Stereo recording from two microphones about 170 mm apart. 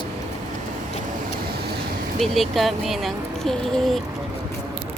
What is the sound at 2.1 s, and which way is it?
Speech, centre (ahead or behind).